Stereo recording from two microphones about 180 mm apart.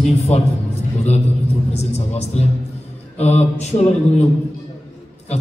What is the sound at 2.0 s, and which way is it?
A man's voice, 35° left (ahead or behind).